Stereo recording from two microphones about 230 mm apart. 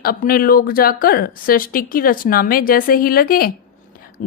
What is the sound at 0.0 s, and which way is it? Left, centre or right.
A woman's voice, left.